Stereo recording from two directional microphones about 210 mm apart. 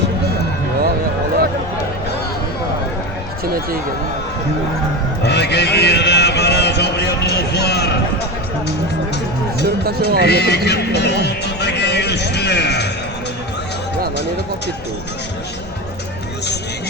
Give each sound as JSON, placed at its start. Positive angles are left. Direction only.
{"t": 5.2, "sound": "a man's voice", "side_deg": 55}
{"t": 9.6, "sound": "speech", "side_deg": -45}
{"t": 10.2, "sound": "speech", "side_deg": 50}